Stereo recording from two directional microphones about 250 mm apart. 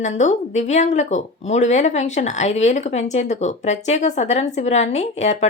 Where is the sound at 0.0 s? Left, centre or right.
Left.